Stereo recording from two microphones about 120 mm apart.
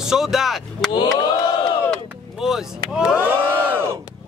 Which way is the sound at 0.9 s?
35° left (ahead or behind).